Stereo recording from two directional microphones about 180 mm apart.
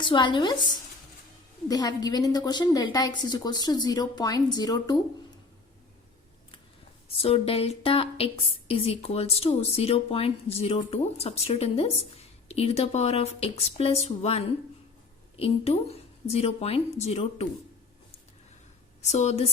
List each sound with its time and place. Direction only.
0.0 s a woman's voice: 25° left (ahead or behind)
1.6 s a woman's voice: 20° left (ahead or behind)
7.2 s a woman's voice: 30° left (ahead or behind)
19.0 s a woman's voice: 35° left (ahead or behind)